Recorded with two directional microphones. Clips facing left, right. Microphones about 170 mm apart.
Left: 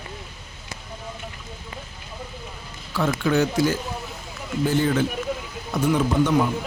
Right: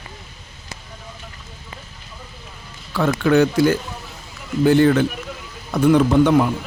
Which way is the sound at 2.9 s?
60° right (ahead or behind).